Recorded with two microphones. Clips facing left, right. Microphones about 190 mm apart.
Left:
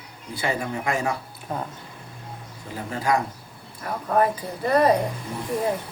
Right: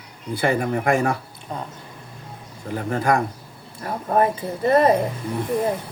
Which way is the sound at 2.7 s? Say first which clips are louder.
Right 4 dB; 55° right (ahead or behind).